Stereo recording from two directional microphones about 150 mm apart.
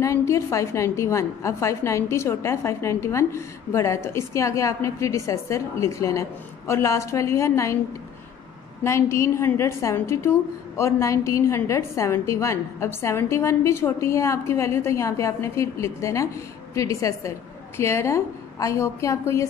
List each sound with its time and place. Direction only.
0.0 s a woman's voice: 20° left (ahead or behind)
8.8 s a woman's voice: 20° left (ahead or behind)